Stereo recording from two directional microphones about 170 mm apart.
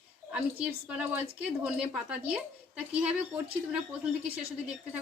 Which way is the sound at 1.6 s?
5° right (ahead or behind).